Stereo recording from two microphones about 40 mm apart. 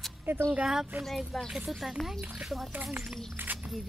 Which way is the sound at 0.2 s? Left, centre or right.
Right.